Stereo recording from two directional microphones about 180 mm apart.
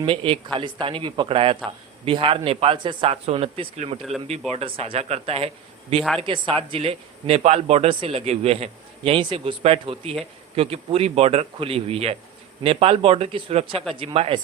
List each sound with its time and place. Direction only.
0.0 s speech: 30° right (ahead or behind)